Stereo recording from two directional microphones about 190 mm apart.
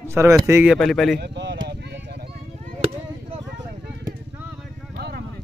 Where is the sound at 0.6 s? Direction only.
Centre (ahead or behind).